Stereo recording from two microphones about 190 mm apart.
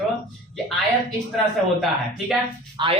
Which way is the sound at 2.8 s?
25° right (ahead or behind).